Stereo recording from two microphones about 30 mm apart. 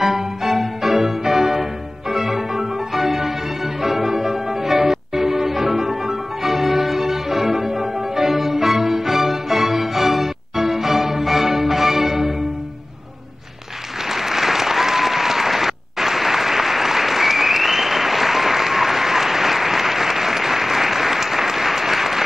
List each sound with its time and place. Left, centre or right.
0.0 s music: centre
14.0 s applause: centre